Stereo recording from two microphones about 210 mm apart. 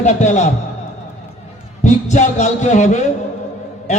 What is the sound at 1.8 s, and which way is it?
A man's voice, 35° left (ahead or behind).